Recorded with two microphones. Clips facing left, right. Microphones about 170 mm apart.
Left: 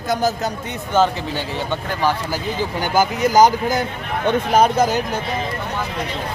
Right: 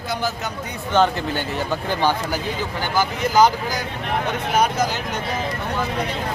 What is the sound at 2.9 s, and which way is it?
Speech, 45° left (ahead or behind).